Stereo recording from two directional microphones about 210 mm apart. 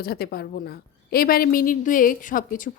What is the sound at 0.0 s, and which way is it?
A woman's voice, 45° left (ahead or behind).